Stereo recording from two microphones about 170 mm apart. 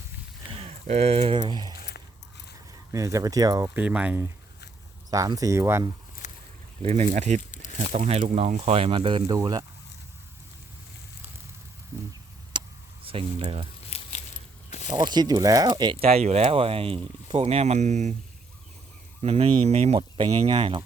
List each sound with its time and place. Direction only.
0.5 s speech: 35° right (ahead or behind)
2.9 s speech: 20° right (ahead or behind)
3.8 s speech: 10° right (ahead or behind)
6.2 s a sound: 45° left (ahead or behind)
6.8 s speech: 40° right (ahead or behind); by 9.6 s 20° right (ahead or behind)
12.5 s a sound: 30° right (ahead or behind)
13.1 s speech: 30° right (ahead or behind)
13.9 s a sound: 35° left (ahead or behind)
14.9 s speech: 25° right (ahead or behind); by 18.1 s 40° right (ahead or behind)
19.2 s speech: 35° right (ahead or behind)